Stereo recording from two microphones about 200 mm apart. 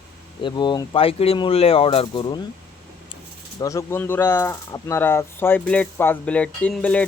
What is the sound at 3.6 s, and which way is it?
Speech, 15° left (ahead or behind).